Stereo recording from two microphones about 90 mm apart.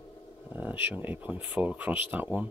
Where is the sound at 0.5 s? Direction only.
20° right (ahead or behind).